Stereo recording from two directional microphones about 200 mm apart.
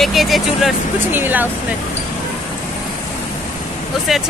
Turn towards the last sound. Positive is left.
turn(degrees=0)  # may be behind; listen again after turning